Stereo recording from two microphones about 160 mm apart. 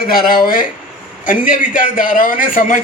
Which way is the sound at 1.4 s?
55° left (ahead or behind).